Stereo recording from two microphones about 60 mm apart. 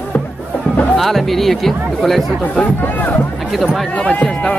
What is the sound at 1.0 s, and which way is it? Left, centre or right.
Speech, centre.